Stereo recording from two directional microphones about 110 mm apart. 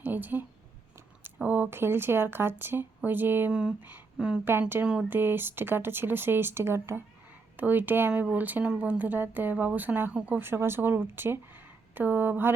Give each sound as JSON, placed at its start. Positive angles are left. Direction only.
{"t": 0.0, "sound": "a sound", "side_deg": -15}
{"t": 1.4, "sound": "speech", "side_deg": -15}
{"t": 3.5, "sound": "speech", "side_deg": -10}